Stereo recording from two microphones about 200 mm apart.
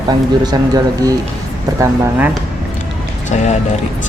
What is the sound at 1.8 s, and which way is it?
Speech, 10° right (ahead or behind).